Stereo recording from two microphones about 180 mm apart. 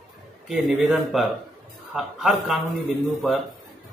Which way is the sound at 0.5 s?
Centre (ahead or behind).